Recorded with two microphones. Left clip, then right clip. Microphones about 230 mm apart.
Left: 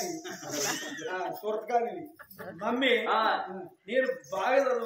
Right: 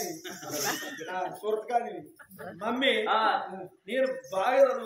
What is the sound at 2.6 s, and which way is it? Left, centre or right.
A man's voice, centre.